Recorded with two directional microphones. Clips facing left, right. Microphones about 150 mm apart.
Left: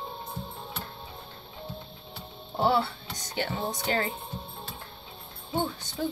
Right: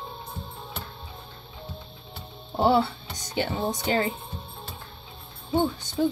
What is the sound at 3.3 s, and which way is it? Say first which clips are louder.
Speech: right 4 dB; 20° right (ahead or behind).